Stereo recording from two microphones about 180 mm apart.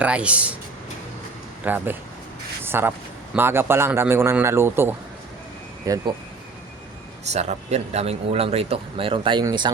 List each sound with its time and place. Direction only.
0.0 s a man's voice: 5° right (ahead or behind)
1.6 s a man's voice: 10° right (ahead or behind)
7.3 s speech: 35° right (ahead or behind)